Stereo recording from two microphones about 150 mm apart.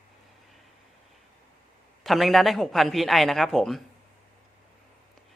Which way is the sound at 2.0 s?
Centre (ahead or behind).